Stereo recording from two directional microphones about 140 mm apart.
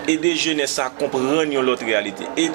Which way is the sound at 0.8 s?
20° right (ahead or behind).